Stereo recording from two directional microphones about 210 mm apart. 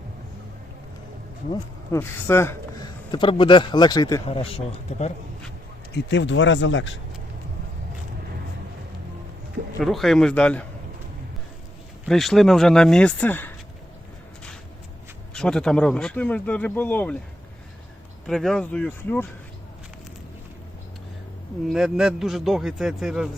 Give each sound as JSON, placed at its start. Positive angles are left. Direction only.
{"t": 1.9, "sound": "speech", "side_deg": 10}
{"t": 5.9, "sound": "speech", "side_deg": 55}
{"t": 9.8, "sound": "speech", "side_deg": 0}
{"t": 12.0, "sound": "speech", "side_deg": 0}
{"t": 15.3, "sound": "speech", "side_deg": 5}
{"t": 18.3, "sound": "speech", "side_deg": 0}
{"t": 21.7, "sound": "speech", "side_deg": 0}